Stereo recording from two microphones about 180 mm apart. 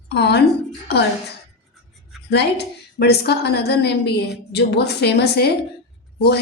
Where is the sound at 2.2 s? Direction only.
65° left (ahead or behind).